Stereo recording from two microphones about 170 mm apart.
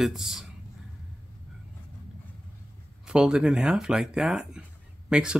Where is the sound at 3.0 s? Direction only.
5° right (ahead or behind).